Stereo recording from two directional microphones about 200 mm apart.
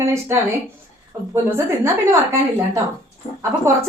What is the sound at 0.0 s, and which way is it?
A woman's voice, 15° right (ahead or behind).